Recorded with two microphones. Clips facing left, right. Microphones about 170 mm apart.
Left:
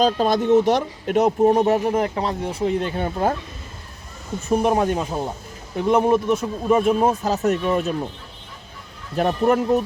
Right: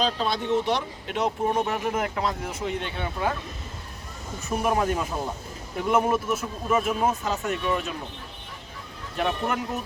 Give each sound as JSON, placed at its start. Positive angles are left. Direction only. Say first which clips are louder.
{"t": 0.0, "sound": "speech", "louder": "left 8 dB", "side_deg": 45}
{"t": 4.4, "sound": "speech", "louder": "left 6 dB", "side_deg": 35}
{"t": 9.1, "sound": "speech", "louder": "left 8 dB", "side_deg": 40}